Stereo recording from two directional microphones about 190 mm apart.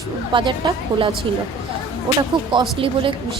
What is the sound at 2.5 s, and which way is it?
Speech, 25° right (ahead or behind).